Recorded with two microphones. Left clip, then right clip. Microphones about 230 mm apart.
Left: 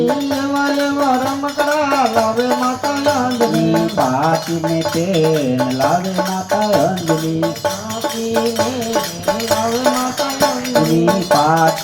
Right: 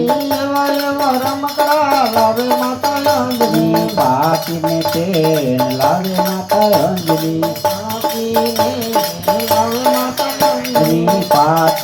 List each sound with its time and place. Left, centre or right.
3.4 s music: right
10.4 s music: right